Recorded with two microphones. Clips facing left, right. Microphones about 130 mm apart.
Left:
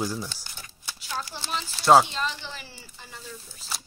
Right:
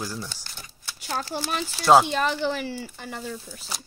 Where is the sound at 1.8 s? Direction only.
Centre (ahead or behind).